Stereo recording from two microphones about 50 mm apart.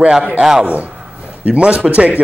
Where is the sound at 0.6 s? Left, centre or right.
Right.